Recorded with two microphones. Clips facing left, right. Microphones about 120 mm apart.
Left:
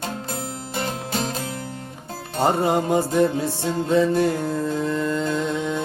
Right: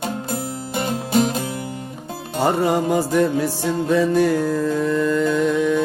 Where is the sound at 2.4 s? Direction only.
25° left (ahead or behind).